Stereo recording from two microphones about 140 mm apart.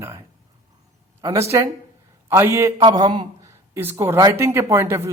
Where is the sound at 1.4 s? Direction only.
20° right (ahead or behind).